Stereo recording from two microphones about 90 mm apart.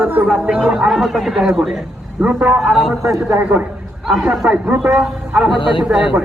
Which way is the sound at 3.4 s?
20° right (ahead or behind).